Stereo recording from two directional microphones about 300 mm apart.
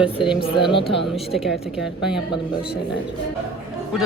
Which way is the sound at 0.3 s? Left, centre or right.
Centre.